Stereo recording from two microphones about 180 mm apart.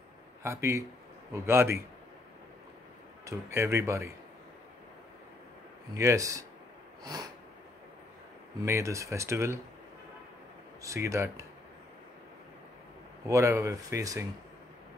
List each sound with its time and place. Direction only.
0.4 s speech: 15° right (ahead or behind)
3.3 s speech: 15° right (ahead or behind)
5.9 s speech: 15° right (ahead or behind)
8.6 s speech: 15° right (ahead or behind)
10.8 s speech: 15° right (ahead or behind)
13.3 s speech: 15° right (ahead or behind)